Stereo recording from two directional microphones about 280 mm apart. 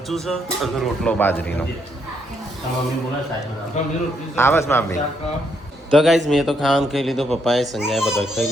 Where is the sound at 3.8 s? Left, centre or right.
Left.